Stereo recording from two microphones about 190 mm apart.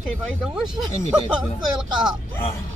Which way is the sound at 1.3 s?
5° right (ahead or behind).